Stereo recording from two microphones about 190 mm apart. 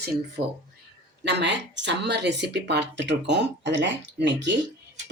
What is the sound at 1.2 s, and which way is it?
Speech, 65° right (ahead or behind).